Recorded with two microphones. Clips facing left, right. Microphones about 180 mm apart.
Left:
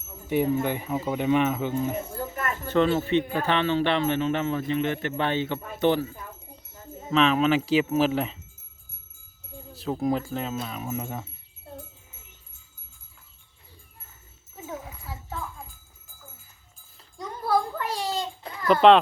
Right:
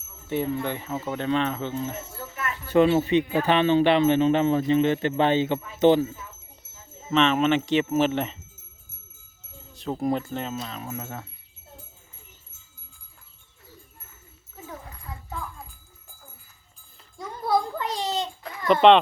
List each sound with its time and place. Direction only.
0.3 s speech: 15° left (ahead or behind)
2.3 s a sound: 45° left (ahead or behind)
2.7 s speech: 15° right (ahead or behind)
6.1 s wind chime: 60° left (ahead or behind)
7.1 s speech: centre (ahead or behind)
9.7 s speech: 5° left (ahead or behind)
14.5 s music: 5° left (ahead or behind)
17.7 s a sound: 5° left (ahead or behind)
18.7 s speech: centre (ahead or behind)